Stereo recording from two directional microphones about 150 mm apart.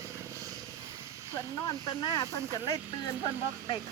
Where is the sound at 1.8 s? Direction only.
25° left (ahead or behind).